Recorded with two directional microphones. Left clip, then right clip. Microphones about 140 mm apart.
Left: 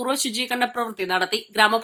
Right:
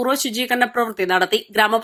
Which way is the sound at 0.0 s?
25° right (ahead or behind).